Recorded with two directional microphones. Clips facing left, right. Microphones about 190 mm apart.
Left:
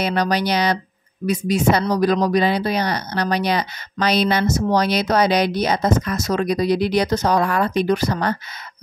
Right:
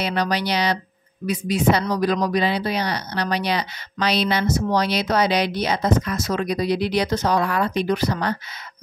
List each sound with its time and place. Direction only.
0.0 s speech: 45° left (ahead or behind)